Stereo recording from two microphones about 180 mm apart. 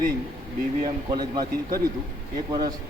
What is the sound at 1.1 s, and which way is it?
Speech, 20° right (ahead or behind).